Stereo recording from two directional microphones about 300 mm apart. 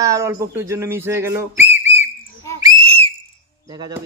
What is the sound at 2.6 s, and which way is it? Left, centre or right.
Whistle, centre.